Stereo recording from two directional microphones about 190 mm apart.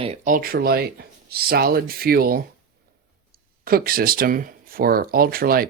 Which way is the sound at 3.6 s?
50° right (ahead or behind).